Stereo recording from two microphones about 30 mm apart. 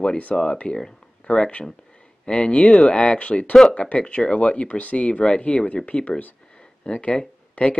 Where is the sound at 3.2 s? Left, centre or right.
Left.